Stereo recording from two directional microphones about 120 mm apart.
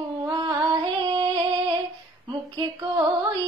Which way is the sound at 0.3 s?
35° right (ahead or behind).